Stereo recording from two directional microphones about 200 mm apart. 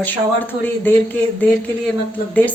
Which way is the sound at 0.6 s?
10° left (ahead or behind).